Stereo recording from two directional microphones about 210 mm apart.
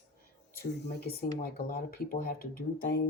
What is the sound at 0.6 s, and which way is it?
Speech, 45° left (ahead or behind).